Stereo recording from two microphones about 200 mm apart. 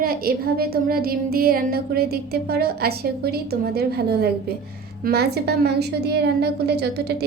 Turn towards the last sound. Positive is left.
turn(degrees=-55)  # may be behind; listen again after turning